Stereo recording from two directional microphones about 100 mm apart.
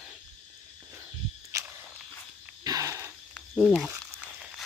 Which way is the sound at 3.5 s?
Centre (ahead or behind).